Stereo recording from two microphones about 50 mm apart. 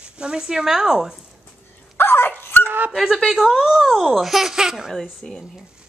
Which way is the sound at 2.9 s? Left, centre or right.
Centre.